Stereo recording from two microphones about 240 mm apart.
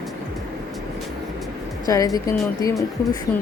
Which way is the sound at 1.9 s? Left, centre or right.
Centre.